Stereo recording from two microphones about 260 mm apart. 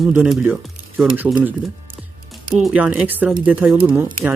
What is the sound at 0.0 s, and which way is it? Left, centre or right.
Speech, centre.